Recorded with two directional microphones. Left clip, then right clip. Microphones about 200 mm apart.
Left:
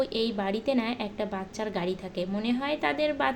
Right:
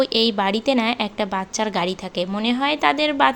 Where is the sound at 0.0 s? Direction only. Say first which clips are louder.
Right 10 dB; 20° right (ahead or behind).